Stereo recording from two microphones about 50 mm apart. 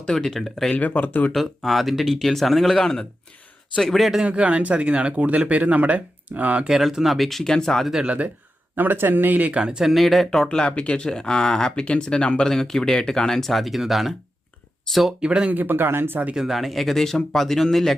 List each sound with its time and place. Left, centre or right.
0.0 s speech: centre
0.7 s speech: left
1.3 s speech: centre
3.9 s speech: centre
4.2 s speech: right
6.7 s speech: centre
8.0 s speech: right
8.7 s speech: right
9.6 s speech: centre
9.8 s speech: centre
10.6 s speech: left; by 15.1 s centre
15.2 s speech: centre
15.5 s speech: right
16.3 s speech: centre